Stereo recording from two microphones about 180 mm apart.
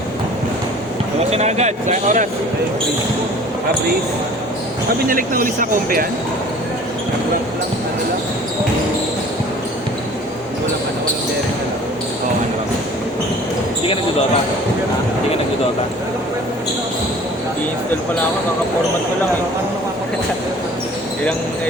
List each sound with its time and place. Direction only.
1.3 s speech: 35° right (ahead or behind)
5.0 s speech: 50° right (ahead or behind)